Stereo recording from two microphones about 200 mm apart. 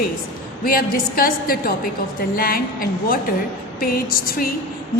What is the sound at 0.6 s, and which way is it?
A woman's voice, 45° left (ahead or behind).